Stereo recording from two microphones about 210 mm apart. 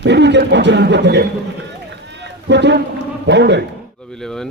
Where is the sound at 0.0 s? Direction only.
55° right (ahead or behind).